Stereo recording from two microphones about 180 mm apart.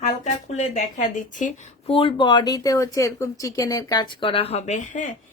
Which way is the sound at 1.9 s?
30° left (ahead or behind).